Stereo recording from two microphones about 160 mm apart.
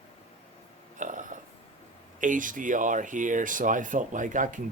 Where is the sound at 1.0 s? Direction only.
55° right (ahead or behind).